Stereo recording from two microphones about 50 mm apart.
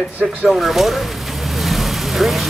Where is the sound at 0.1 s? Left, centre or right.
Right.